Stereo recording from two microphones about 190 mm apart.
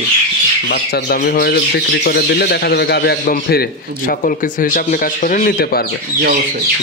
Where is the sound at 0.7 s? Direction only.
55° left (ahead or behind).